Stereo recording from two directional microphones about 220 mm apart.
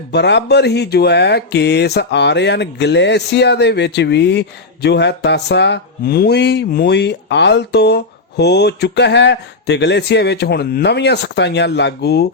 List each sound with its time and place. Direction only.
0.1 s speech: 50° left (ahead or behind)